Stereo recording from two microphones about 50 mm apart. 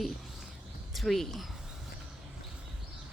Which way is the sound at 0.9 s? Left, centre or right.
Centre.